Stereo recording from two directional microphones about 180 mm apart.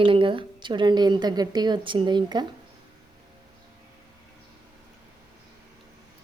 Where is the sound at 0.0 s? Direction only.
30° right (ahead or behind).